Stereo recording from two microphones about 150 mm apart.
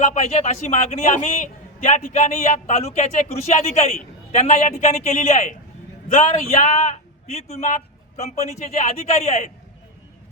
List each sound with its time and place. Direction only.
0.0 s speech: 50° left (ahead or behind)